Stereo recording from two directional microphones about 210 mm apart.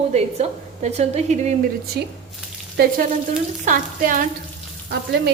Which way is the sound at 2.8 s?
50° right (ahead or behind).